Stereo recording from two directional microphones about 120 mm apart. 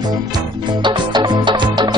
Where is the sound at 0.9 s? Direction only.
40° right (ahead or behind).